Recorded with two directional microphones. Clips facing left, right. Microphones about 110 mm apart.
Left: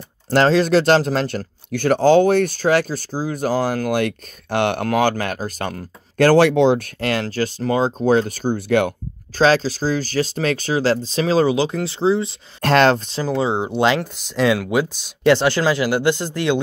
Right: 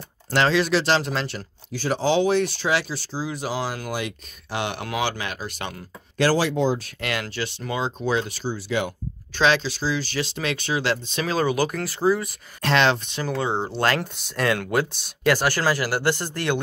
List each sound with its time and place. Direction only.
0.3 s speech: 40° left (ahead or behind); by 6.9 s 70° left (ahead or behind)
7.0 s speech: 35° left (ahead or behind); by 8.9 s 55° left (ahead or behind)
9.3 s speech: 40° left (ahead or behind)
12.6 s speech: 45° left (ahead or behind)
13.3 s speech: 20° left (ahead or behind)
15.2 s speech: 20° left (ahead or behind)